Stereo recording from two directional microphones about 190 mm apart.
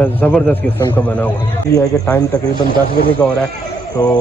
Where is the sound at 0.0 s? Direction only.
10° left (ahead or behind).